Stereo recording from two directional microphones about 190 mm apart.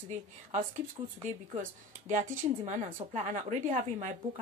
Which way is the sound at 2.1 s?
40° right (ahead or behind).